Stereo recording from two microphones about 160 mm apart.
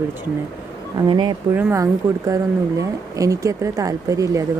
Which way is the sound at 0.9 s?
25° right (ahead or behind).